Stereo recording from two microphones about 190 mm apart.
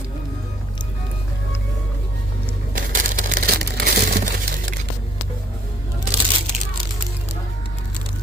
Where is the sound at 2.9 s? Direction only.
45° right (ahead or behind).